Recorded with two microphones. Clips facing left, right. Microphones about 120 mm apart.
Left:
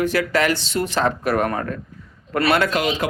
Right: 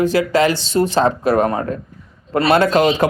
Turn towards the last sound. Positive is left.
turn(degrees=-35)  # may be behind; listen again after turning